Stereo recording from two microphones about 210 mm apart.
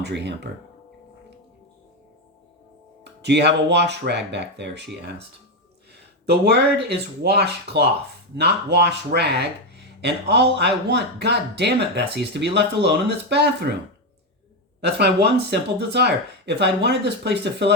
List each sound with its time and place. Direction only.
0.0 s speech: 55° right (ahead or behind)
3.0 s speech: 55° right (ahead or behind)
6.2 s speech: 50° right (ahead or behind)
14.8 s speech: 50° right (ahead or behind)